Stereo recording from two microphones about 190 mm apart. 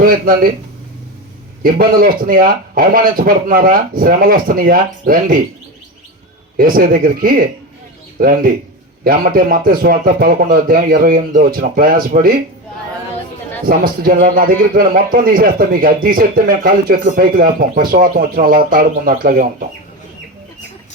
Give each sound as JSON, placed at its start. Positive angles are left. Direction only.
{"t": 0.0, "sound": "speech", "side_deg": -50}
{"t": 1.6, "sound": "speech", "side_deg": -50}
{"t": 6.6, "sound": "speech", "side_deg": -50}
{"t": 13.7, "sound": "speech", "side_deg": -50}